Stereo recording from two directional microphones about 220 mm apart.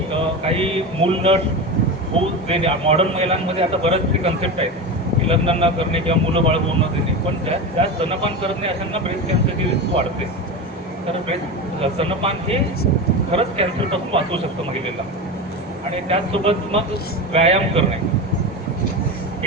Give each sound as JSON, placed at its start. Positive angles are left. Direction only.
{"t": 0.1, "sound": "speech", "side_deg": -25}
{"t": 7.8, "sound": "speech", "side_deg": -25}
{"t": 11.8, "sound": "speech", "side_deg": -25}
{"t": 16.0, "sound": "speech", "side_deg": -25}